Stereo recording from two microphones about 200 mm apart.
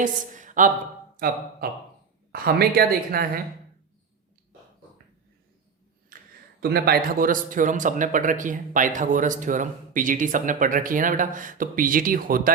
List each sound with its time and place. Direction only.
0.0 s a woman's voice: 40° right (ahead or behind)
2.3 s speech: 50° right (ahead or behind)
6.1 s a sound: 45° right (ahead or behind)
6.6 s speech: 50° right (ahead or behind)